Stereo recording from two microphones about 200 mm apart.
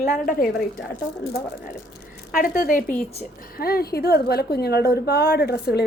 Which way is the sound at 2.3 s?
45° left (ahead or behind).